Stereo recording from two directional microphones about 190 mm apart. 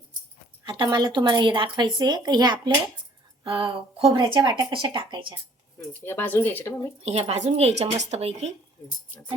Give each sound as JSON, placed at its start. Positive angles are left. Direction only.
{"t": 0.6, "sound": "a woman's voice", "side_deg": -25}
{"t": 5.9, "sound": "speech", "side_deg": 10}
{"t": 7.0, "sound": "speech", "side_deg": -35}